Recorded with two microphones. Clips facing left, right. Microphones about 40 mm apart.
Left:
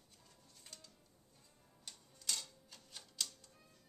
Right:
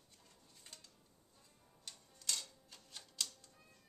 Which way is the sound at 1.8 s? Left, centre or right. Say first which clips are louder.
Even; centre.